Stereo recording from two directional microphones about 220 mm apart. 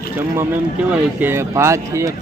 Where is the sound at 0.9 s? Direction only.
10° right (ahead or behind).